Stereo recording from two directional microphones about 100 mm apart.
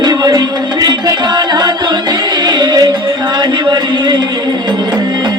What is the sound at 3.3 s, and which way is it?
Chant, 45° right (ahead or behind).